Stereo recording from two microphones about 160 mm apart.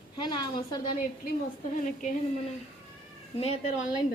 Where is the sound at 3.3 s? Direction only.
40° left (ahead or behind).